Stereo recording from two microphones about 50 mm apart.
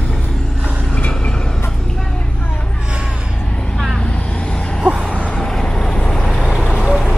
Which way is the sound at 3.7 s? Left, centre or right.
Centre.